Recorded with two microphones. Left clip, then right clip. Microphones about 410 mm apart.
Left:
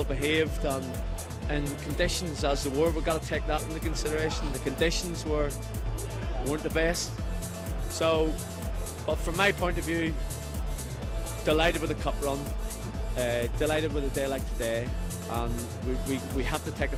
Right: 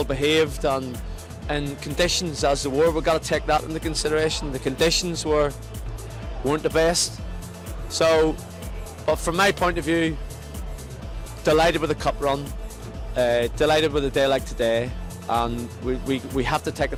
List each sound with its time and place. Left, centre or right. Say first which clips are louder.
0.0 s speech: right 7 dB; right
6.5 s speech: right 8 dB; right
11.4 s speech: right 7 dB; right